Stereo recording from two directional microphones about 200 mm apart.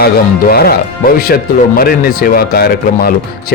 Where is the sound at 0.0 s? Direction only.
50° left (ahead or behind).